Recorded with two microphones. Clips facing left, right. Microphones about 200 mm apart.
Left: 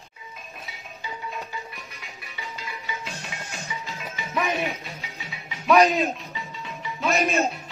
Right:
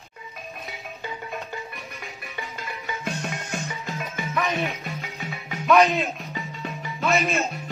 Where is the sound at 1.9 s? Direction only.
50° right (ahead or behind).